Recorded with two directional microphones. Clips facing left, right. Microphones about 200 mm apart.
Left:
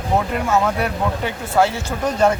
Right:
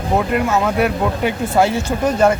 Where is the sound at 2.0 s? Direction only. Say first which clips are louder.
Right 2 dB; centre (ahead or behind).